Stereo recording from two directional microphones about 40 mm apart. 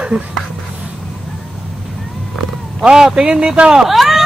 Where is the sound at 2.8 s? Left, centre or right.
Centre.